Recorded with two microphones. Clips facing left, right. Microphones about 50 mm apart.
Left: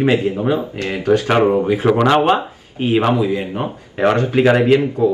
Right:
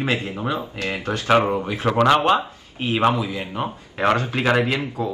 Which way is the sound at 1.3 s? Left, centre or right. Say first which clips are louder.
Left 6 dB; centre.